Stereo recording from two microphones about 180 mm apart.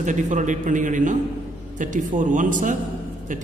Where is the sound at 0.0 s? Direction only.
45° right (ahead or behind).